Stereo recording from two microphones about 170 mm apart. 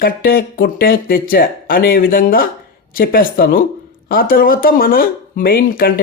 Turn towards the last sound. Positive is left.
turn(degrees=60)  # may be behind; listen again after turning